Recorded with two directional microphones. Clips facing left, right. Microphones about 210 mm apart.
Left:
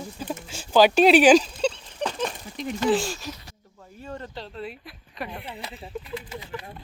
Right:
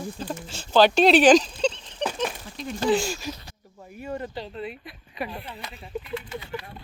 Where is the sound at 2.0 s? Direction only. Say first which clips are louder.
Even; 5° right (ahead or behind).